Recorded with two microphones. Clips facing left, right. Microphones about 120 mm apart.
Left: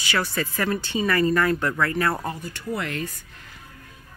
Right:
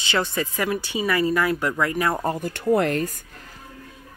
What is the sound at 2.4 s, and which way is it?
Speech, 50° right (ahead or behind).